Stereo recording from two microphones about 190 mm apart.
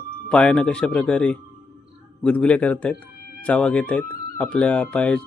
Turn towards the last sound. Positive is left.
turn(degrees=5)  # may be behind; listen again after turning